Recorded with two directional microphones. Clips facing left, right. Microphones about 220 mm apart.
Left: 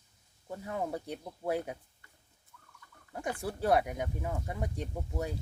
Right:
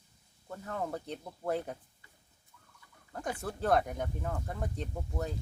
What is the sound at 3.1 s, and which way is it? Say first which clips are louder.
Speech: left 1 dB; 10° left (ahead or behind).